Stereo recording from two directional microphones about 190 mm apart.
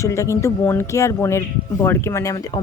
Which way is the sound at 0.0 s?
15° left (ahead or behind).